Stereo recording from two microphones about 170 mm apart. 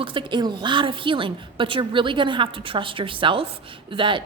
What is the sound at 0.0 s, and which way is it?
A woman's voice, 30° right (ahead or behind).